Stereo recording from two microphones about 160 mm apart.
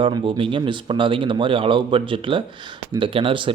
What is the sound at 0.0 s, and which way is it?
Speech, 30° right (ahead or behind).